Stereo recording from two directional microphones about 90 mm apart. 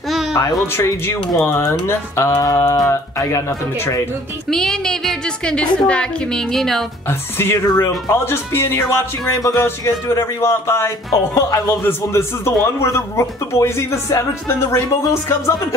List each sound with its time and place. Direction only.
0.4 s a man's voice: 40° left (ahead or behind)
4.5 s a woman's voice: 5° left (ahead or behind)
7.1 s a man's voice: 25° left (ahead or behind)